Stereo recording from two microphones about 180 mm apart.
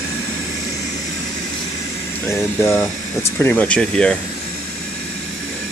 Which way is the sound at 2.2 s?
15° left (ahead or behind).